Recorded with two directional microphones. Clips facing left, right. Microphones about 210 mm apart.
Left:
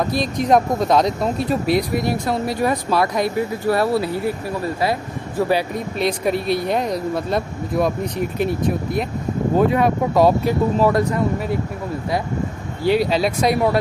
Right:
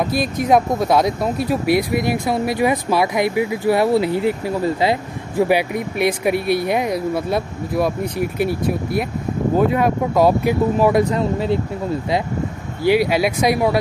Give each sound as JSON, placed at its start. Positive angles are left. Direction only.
{"t": 0.0, "sound": "speech", "side_deg": -5}
{"t": 10.8, "sound": "speech", "side_deg": -15}
{"t": 12.8, "sound": "speech", "side_deg": -10}